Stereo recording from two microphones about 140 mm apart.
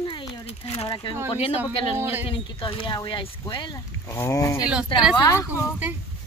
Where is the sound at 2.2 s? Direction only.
40° left (ahead or behind).